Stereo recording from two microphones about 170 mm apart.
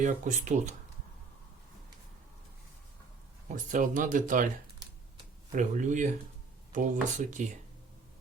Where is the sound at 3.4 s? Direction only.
50° right (ahead or behind).